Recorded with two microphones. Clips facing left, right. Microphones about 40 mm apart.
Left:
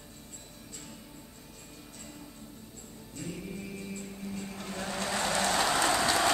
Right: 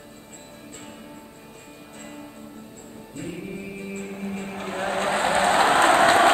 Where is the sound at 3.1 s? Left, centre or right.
Right.